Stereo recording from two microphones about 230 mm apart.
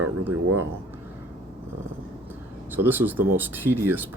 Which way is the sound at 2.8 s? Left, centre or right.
Centre.